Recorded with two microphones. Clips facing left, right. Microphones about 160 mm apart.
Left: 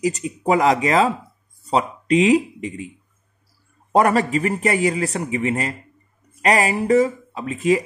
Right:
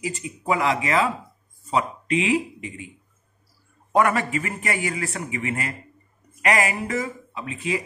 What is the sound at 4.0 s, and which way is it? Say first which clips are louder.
Speech: left 4 dB; 35° left (ahead or behind).